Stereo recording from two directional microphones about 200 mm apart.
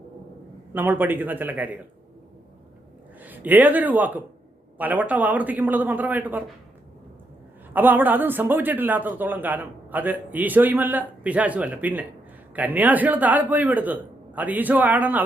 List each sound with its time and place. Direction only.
0.7 s a man's voice: 10° right (ahead or behind)
3.2 s a man's voice: 10° right (ahead or behind)
7.7 s a man's voice: 10° right (ahead or behind)